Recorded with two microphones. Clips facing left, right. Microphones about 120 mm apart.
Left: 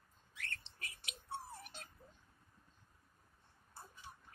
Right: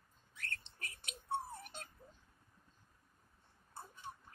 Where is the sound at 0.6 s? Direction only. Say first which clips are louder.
Right 1 dB; 50° right (ahead or behind).